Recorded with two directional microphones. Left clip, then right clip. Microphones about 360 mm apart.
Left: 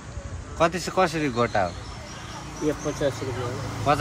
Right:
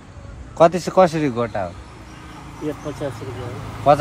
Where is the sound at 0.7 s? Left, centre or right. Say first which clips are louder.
Right 8 dB; centre.